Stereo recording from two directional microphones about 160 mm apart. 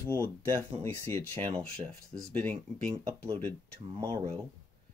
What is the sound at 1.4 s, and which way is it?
Speech, 30° right (ahead or behind).